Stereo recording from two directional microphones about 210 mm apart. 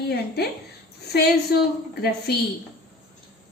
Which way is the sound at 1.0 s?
50° left (ahead or behind).